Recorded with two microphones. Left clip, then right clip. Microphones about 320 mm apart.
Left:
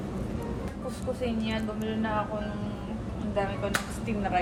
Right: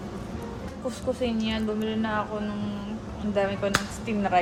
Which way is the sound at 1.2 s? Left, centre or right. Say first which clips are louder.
Right 3 dB; right.